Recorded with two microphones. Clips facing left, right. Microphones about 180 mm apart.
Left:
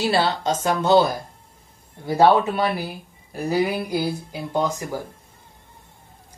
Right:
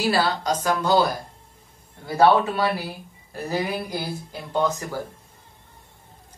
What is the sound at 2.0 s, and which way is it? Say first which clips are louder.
Speech: left 1 dB; 20° left (ahead or behind).